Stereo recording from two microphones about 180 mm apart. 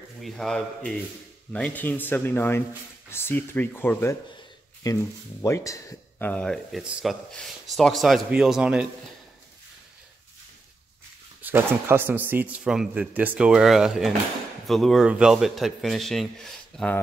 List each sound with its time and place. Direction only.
0.2 s speech: centre (ahead or behind)
11.4 s speech: 15° right (ahead or behind); by 17.0 s 5° left (ahead or behind)